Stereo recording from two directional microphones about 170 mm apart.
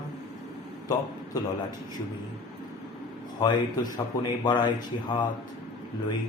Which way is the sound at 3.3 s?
25° left (ahead or behind).